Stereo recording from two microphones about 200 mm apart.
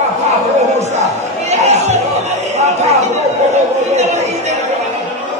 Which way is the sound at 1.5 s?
35° right (ahead or behind).